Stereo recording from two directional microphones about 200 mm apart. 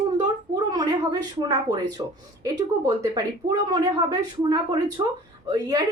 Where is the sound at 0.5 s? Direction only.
20° right (ahead or behind).